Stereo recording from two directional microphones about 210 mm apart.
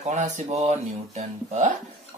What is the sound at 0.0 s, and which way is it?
Speech, 35° right (ahead or behind).